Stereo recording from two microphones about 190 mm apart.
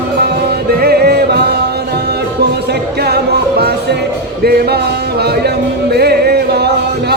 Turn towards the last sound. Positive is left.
turn(degrees=-55)  # may be behind; listen again after turning